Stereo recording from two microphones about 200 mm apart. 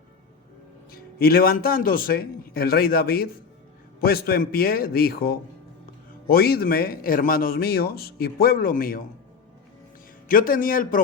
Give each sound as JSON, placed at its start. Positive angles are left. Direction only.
{"t": 0.9, "sound": "speech", "side_deg": 50}
{"t": 10.2, "sound": "speech", "side_deg": 45}